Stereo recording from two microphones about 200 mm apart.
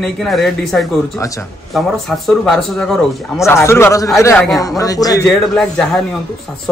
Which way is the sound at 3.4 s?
15° left (ahead or behind).